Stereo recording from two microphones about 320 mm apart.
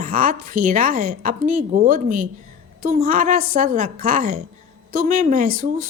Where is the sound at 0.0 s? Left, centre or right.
Right.